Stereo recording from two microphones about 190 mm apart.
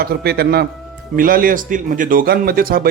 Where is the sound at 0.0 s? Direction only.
55° right (ahead or behind).